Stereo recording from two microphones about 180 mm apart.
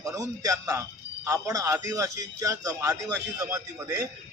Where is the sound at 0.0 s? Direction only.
20° right (ahead or behind).